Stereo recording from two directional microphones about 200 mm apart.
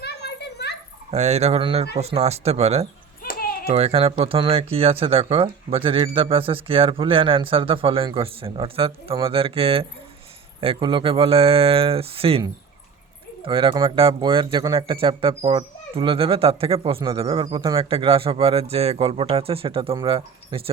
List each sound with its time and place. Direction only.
0.0 s children playing: 55° left (ahead or behind)
1.1 s speech: 30° right (ahead or behind)
3.2 s a sound: 45° left (ahead or behind)
3.7 s speech: 30° right (ahead or behind)
13.4 s speech: 25° right (ahead or behind)